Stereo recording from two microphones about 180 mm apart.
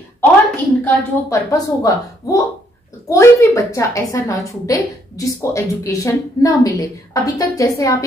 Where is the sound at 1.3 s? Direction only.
20° left (ahead or behind).